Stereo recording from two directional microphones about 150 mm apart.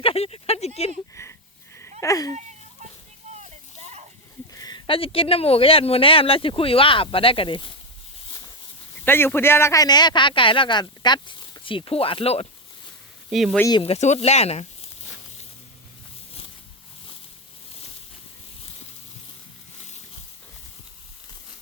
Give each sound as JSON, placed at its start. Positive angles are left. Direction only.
{"t": 0.0, "sound": "speech", "side_deg": 40}
{"t": 1.1, "sound": "wheeze", "side_deg": 20}
{"t": 2.0, "sound": "speech", "side_deg": 25}
{"t": 3.3, "sound": "a sound", "side_deg": -50}
{"t": 4.5, "sound": "a man's voice", "side_deg": 25}
{"t": 9.0, "sound": "a man's voice", "side_deg": 15}
{"t": 13.3, "sound": "speech", "side_deg": 0}
{"t": 13.8, "sound": "speech", "side_deg": 45}